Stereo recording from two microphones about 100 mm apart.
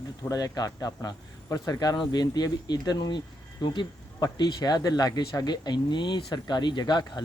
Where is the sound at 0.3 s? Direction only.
35° left (ahead or behind).